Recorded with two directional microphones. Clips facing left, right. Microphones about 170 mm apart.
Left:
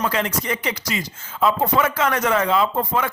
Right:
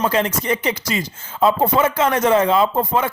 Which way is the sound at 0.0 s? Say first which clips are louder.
Right 4 dB; 25° right (ahead or behind).